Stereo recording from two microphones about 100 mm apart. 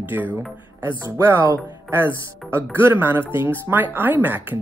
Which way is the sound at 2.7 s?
20° right (ahead or behind).